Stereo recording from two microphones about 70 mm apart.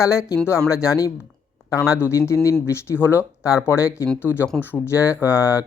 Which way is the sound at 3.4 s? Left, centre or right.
Left.